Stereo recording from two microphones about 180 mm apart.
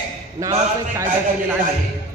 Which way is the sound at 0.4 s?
15° right (ahead or behind).